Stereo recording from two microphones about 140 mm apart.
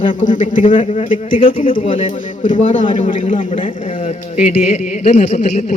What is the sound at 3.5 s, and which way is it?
Speech, 40° left (ahead or behind).